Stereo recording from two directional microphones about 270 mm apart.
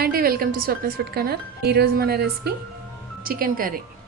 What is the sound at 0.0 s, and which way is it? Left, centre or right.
Speech, right.